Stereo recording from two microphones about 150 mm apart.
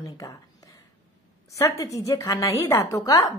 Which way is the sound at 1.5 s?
20° left (ahead or behind).